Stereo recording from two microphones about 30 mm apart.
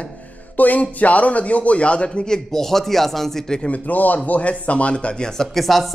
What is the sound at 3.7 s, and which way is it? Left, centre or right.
Speech, left.